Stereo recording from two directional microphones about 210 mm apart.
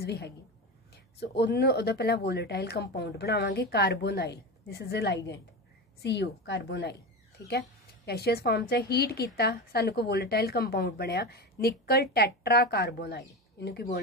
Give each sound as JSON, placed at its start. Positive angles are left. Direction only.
{"t": 0.0, "sound": "a woman's voice", "side_deg": 50}